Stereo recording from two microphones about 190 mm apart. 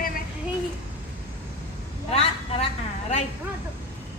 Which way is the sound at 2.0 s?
30° left (ahead or behind).